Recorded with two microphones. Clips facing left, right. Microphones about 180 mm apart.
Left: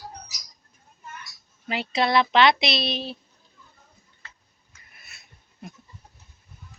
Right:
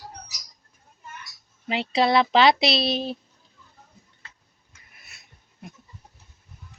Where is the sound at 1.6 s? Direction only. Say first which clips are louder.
Right 3 dB; 25° right (ahead or behind); by 3.2 s 40° right (ahead or behind).